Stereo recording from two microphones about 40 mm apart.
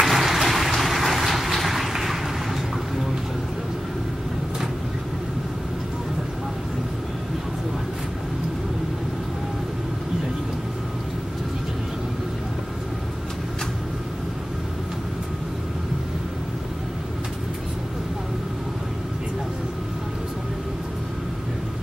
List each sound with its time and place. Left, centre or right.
0.0 s vehicle: centre